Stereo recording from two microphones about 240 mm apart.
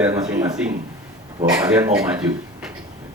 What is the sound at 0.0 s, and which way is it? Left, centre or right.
Speech, centre.